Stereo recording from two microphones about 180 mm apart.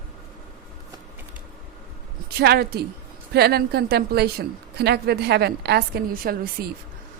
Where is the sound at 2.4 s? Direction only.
60° right (ahead or behind).